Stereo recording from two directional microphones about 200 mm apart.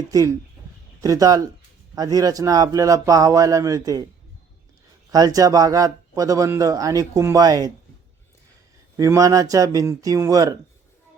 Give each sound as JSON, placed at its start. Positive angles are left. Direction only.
{"t": 0.1, "sound": "a man's voice", "side_deg": -15}
{"t": 5.1, "sound": "a man's voice", "side_deg": -20}
{"t": 9.0, "sound": "a man's voice", "side_deg": -15}